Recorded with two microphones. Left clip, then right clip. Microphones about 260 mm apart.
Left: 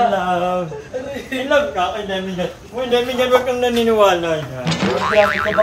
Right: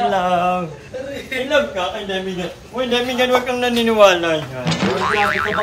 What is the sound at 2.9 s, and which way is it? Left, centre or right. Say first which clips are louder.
A man's voice: left 2 dB; centre.